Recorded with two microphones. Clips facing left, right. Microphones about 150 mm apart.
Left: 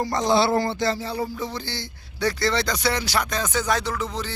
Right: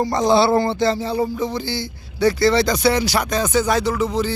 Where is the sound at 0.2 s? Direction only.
30° right (ahead or behind).